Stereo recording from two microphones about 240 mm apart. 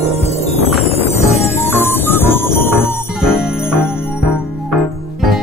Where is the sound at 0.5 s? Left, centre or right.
Left.